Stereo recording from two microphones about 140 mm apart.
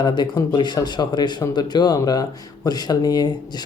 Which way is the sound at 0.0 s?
30° left (ahead or behind).